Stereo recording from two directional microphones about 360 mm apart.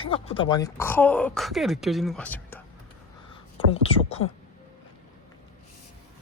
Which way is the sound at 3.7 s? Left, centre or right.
Centre.